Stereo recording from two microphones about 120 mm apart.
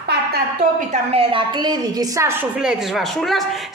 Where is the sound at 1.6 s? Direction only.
35° right (ahead or behind).